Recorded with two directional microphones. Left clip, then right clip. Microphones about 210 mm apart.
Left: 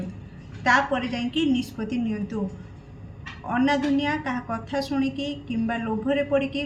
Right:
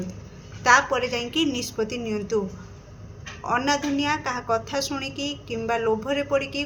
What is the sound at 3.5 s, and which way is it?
A woman's voice, 50° right (ahead or behind).